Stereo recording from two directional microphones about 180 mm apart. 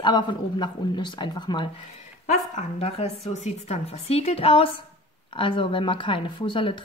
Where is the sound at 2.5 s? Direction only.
35° left (ahead or behind).